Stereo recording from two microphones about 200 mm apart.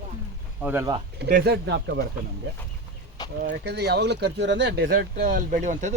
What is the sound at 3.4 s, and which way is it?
Speech, 55° right (ahead or behind).